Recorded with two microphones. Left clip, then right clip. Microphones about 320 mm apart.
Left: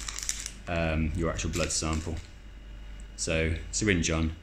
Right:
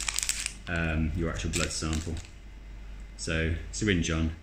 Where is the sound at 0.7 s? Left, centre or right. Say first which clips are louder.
Left 3 dB; centre.